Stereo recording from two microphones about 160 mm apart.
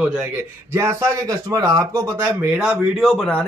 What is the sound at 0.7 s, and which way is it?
Speech, 15° right (ahead or behind).